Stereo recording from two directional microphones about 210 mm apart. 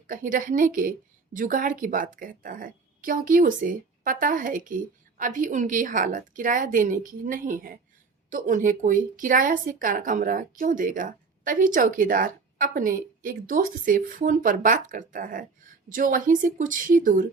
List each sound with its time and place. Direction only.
0.1 s a woman's voice: 40° right (ahead or behind)